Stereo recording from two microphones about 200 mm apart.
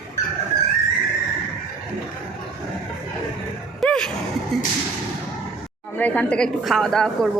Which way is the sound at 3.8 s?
5° left (ahead or behind).